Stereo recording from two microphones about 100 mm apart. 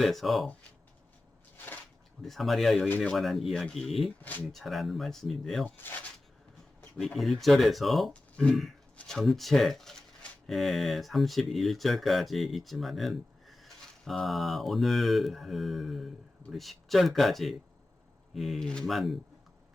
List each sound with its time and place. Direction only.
0.0 s speech: centre (ahead or behind)
1.5 s a sound: 20° left (ahead or behind)
2.2 s speech: centre (ahead or behind)
4.2 s speech: 15° left (ahead or behind)
4.5 s speech: centre (ahead or behind)
5.6 s speech: 20° left (ahead or behind)
7.0 s speech: centre (ahead or behind)